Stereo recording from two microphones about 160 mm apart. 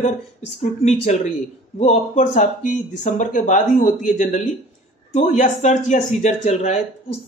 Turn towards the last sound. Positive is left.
turn(degrees=45)  # may be behind; listen again after turning